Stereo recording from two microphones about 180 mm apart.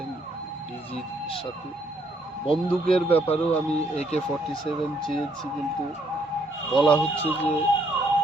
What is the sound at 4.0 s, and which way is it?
Speech, 35° left (ahead or behind).